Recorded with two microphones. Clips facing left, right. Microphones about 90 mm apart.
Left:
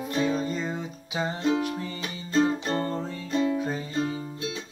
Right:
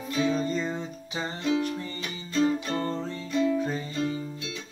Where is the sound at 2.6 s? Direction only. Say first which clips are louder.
Left 2 dB; 45° left (ahead or behind).